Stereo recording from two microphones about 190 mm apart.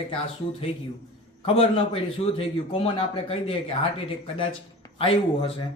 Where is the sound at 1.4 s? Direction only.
30° left (ahead or behind).